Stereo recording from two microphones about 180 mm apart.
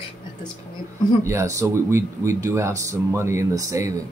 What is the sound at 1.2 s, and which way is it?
Speech, 15° right (ahead or behind).